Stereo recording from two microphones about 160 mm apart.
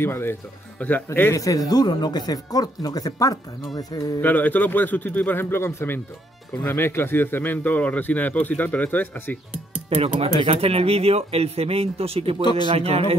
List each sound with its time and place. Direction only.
0.0 s a man's voice: 15° left (ahead or behind)
4.2 s a man's voice: 10° left (ahead or behind)
9.8 s speech: 40° right (ahead or behind)